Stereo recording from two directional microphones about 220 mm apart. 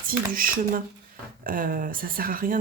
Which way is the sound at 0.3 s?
40° right (ahead or behind).